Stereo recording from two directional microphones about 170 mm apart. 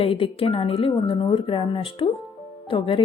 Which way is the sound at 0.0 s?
35° left (ahead or behind).